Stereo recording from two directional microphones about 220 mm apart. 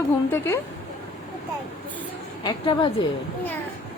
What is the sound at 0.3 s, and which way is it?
Speech, 10° left (ahead or behind).